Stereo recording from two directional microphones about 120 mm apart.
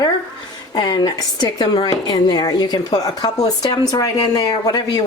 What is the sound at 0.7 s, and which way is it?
A woman's voice, 40° left (ahead or behind).